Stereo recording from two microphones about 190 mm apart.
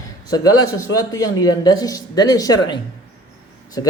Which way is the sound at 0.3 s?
20° left (ahead or behind).